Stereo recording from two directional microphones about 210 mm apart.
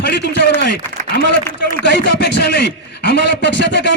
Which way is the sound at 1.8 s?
55° left (ahead or behind).